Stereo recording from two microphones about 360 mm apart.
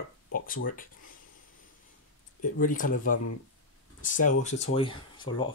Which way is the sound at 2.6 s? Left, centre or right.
Left.